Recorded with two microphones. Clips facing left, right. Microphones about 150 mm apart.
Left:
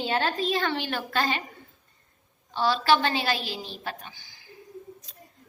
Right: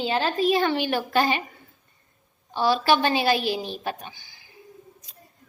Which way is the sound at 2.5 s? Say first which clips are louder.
Right 2 dB; 15° right (ahead or behind).